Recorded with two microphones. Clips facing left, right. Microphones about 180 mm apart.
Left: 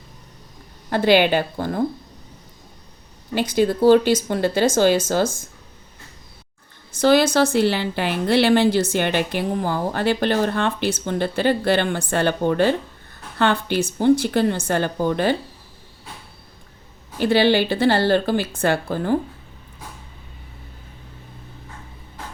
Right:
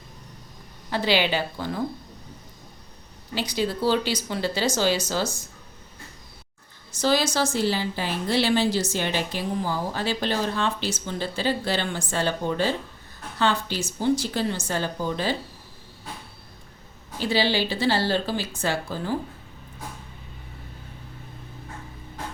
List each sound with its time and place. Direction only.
0.9 s speech: 55° left (ahead or behind)
3.3 s speech: 50° left (ahead or behind)
6.9 s a woman's voice: 60° left (ahead or behind)
17.2 s a woman's voice: 60° left (ahead or behind)